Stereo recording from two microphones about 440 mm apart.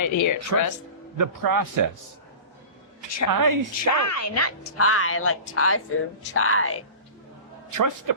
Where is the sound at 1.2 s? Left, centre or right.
Right.